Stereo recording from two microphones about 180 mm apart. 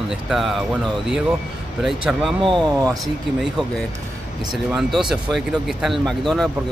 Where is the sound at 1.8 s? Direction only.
Centre (ahead or behind).